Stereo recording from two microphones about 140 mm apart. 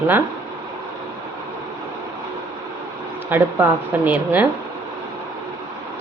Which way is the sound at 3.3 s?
15° right (ahead or behind).